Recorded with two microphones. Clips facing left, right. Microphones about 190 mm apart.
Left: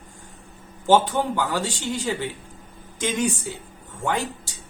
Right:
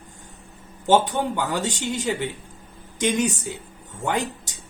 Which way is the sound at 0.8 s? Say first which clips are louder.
Left 1 dB; 20° right (ahead or behind).